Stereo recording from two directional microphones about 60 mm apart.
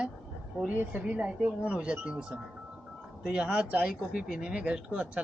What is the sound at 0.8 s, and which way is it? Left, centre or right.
Speech, right.